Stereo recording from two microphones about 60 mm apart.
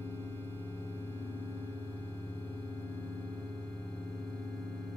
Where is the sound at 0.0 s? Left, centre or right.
Left.